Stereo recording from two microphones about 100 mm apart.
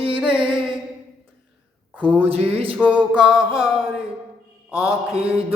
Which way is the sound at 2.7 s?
15° right (ahead or behind).